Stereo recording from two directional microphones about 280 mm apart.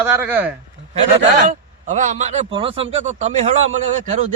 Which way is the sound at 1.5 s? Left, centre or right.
Right.